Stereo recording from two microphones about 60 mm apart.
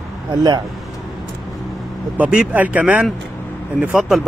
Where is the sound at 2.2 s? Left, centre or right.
Right.